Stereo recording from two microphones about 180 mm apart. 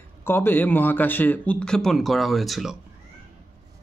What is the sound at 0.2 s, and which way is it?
A man's voice, 15° left (ahead or behind).